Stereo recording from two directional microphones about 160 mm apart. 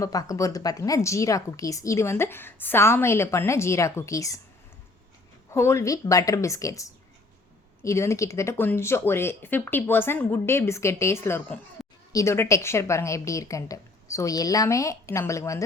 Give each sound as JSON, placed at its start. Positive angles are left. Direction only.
{"t": 0.0, "sound": "a woman's voice", "side_deg": 20}
{"t": 5.5, "sound": "a woman's voice", "side_deg": 15}